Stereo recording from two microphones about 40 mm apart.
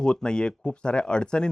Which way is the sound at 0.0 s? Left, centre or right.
Centre.